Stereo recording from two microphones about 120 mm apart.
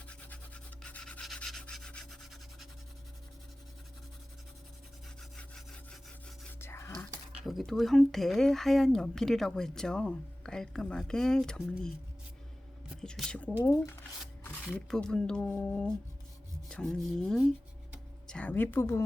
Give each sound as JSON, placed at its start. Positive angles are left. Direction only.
{"t": 0.1, "sound": "rub", "side_deg": 10}
{"t": 6.6, "sound": "whispering", "side_deg": 25}
{"t": 7.3, "sound": "speech", "side_deg": 0}
{"t": 13.0, "sound": "a sound", "side_deg": 5}
{"t": 13.7, "sound": "speech", "side_deg": 25}
{"t": 14.4, "sound": "a sound", "side_deg": 15}
{"t": 14.8, "sound": "speech", "side_deg": 5}